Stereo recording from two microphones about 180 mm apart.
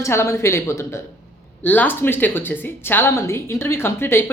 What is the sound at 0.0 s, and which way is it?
Speech, 15° left (ahead or behind).